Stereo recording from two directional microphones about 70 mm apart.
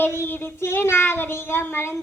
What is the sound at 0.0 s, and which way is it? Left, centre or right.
Child singing, left.